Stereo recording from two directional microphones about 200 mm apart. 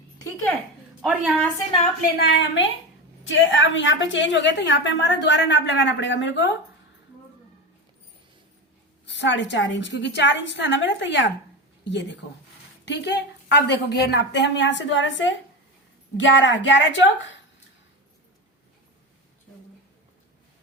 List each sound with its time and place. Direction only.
1.0 s a woman's voice: 5° right (ahead or behind)
2.1 s a woman's voice: 60° left (ahead or behind)
9.0 s a woman's voice: 65° left (ahead or behind)